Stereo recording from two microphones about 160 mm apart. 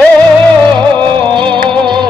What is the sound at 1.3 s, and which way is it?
Music, 30° right (ahead or behind).